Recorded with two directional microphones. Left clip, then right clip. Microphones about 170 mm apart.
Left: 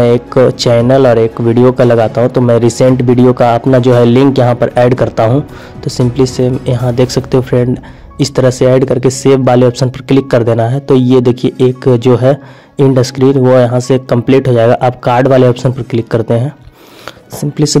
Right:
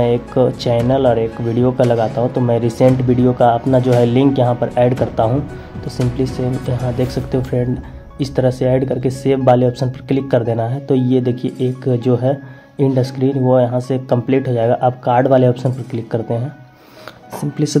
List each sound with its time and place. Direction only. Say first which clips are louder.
0.0 s speech: left 7 dB; 40° left (ahead or behind)
17.4 s speech: left 7 dB; 30° left (ahead or behind)